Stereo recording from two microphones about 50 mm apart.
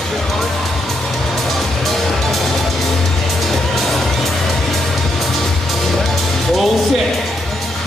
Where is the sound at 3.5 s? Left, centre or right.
Centre.